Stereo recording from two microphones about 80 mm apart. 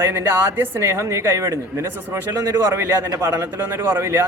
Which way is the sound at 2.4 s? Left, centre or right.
Right.